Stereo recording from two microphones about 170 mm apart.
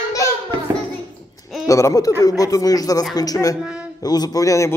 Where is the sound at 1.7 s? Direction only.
20° left (ahead or behind).